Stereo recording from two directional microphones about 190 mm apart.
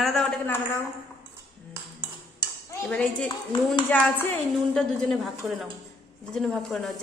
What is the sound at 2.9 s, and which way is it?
A woman's voice, 5° left (ahead or behind).